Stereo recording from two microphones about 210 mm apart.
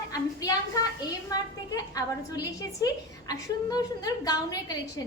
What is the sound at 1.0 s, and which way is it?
A woman's voice, 20° left (ahead or behind).